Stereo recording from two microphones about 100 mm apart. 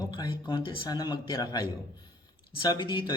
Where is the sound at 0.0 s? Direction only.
45° left (ahead or behind).